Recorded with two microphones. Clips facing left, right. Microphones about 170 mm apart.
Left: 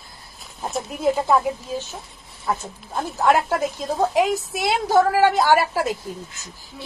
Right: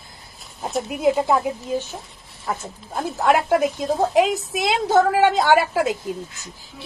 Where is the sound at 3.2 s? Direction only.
15° right (ahead or behind).